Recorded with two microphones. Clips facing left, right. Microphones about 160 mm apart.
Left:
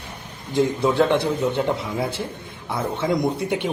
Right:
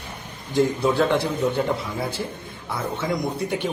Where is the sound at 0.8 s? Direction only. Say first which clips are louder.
Left 2 dB; 25° left (ahead or behind).